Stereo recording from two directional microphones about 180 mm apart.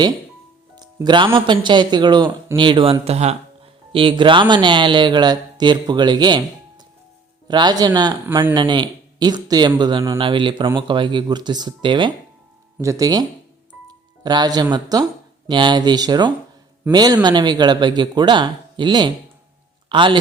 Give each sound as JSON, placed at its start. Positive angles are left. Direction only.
{"t": 0.8, "sound": "speech", "side_deg": -25}
{"t": 7.4, "sound": "speech", "side_deg": -25}
{"t": 14.3, "sound": "speech", "side_deg": -25}